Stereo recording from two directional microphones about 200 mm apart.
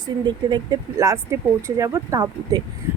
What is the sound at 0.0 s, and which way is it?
Speech, 20° right (ahead or behind).